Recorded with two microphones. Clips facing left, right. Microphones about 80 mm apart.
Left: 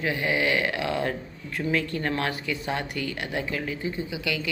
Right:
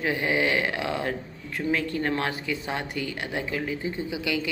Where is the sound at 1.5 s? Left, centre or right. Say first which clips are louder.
Even; centre.